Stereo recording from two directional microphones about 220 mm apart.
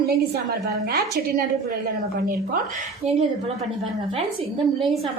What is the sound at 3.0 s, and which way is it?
Speech, 30° right (ahead or behind).